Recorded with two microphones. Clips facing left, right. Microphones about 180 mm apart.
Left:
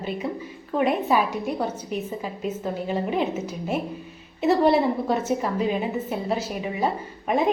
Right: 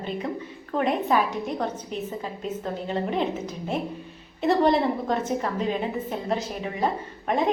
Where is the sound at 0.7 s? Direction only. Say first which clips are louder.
Left 2 dB; 5° left (ahead or behind).